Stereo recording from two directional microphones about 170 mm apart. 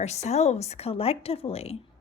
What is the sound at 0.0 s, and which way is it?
A woman's voice, 40° left (ahead or behind).